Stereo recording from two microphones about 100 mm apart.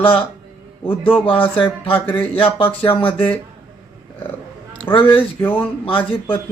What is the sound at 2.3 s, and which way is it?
Speech, 60° left (ahead or behind).